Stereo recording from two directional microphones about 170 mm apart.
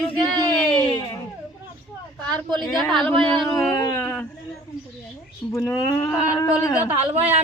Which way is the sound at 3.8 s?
10° left (ahead or behind).